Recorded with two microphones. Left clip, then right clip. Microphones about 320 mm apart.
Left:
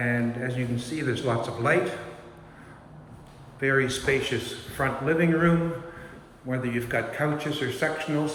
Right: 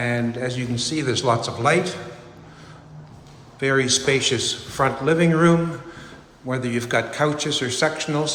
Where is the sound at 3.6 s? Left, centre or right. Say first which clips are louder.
Right 5 dB; centre.